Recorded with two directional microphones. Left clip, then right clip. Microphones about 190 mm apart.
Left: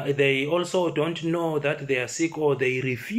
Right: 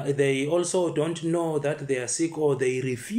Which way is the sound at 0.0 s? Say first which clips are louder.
Left 2 dB; 35° right (ahead or behind).